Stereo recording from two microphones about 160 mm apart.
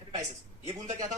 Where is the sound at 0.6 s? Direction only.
45° right (ahead or behind).